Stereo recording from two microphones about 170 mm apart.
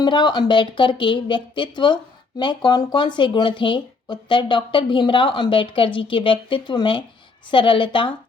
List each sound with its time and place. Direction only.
0.0 s speech: 25° left (ahead or behind)